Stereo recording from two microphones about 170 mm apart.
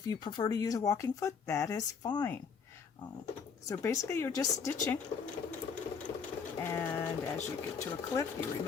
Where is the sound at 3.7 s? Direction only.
20° left (ahead or behind).